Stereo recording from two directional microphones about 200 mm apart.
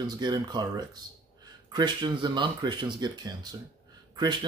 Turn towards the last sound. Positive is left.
turn(degrees=-20)  # may be behind; listen again after turning